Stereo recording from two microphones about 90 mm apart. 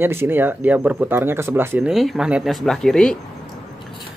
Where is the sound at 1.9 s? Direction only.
Centre (ahead or behind).